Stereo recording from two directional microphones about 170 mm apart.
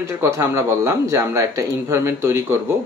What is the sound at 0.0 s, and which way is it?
Speech, 15° right (ahead or behind).